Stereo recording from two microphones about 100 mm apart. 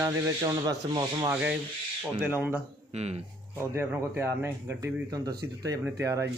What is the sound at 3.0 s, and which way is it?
Speech, 90° right.